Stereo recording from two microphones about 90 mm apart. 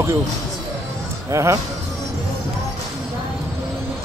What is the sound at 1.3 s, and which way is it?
Speech, 35° right (ahead or behind).